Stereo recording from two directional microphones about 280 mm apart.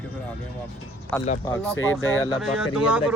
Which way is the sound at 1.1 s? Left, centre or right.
Centre.